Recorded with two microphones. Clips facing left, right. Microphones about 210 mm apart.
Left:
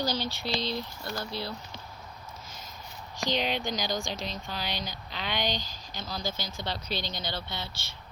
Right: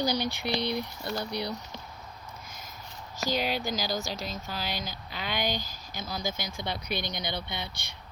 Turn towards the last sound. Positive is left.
turn(degrees=-15)  # may be behind; listen again after turning